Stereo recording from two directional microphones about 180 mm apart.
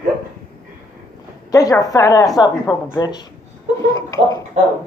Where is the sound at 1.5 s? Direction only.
20° left (ahead or behind).